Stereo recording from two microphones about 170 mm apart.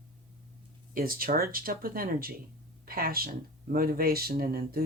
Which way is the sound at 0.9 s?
60° right (ahead or behind).